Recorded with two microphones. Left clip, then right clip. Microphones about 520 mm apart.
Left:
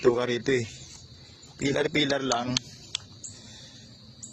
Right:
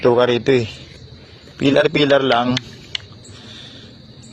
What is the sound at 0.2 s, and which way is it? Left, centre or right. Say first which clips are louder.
A man's voice: right 12 dB; left.